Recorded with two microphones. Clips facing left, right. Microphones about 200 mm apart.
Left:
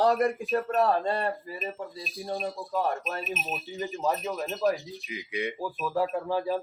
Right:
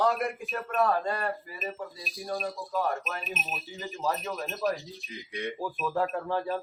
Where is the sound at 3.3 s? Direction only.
Centre (ahead or behind).